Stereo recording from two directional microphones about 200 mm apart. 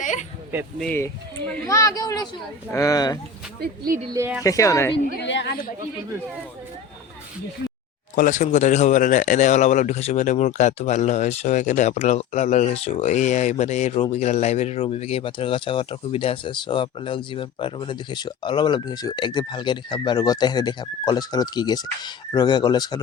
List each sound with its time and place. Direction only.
0.0 s a sound: 40° left (ahead or behind)
0.8 s speech: 10° left (ahead or behind)
3.6 s speech: 45° right (ahead or behind)
4.1 s speech: 15° right (ahead or behind)
4.4 s speech: 15° left (ahead or behind)
5.2 s speech: 60° left (ahead or behind)
8.1 s speech: 40° left (ahead or behind); by 23.0 s 20° left (ahead or behind)